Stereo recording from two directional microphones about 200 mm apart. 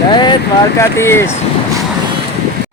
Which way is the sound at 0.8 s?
10° left (ahead or behind).